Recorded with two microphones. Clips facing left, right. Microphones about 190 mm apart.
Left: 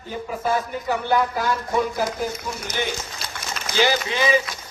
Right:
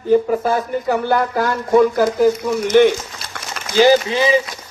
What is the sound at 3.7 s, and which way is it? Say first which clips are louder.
Speech: right 9 dB; 40° right (ahead or behind).